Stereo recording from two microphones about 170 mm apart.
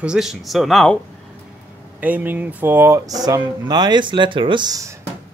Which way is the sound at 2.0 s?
10° right (ahead or behind).